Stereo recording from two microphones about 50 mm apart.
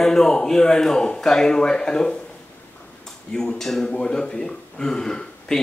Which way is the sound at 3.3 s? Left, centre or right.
Centre.